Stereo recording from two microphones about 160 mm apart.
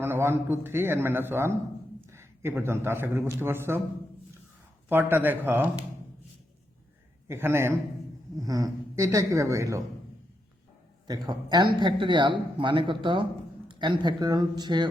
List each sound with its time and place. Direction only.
0.0 s a man's voice: 15° right (ahead or behind)
4.9 s a man's voice: 15° right (ahead or behind)
7.3 s a man's voice: 15° right (ahead or behind)
11.0 s a man's voice: 25° right (ahead or behind)